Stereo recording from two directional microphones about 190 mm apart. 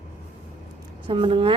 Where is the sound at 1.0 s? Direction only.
25° right (ahead or behind).